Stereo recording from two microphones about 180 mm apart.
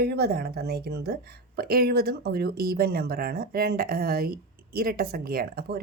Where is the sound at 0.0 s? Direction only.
65° right (ahead or behind).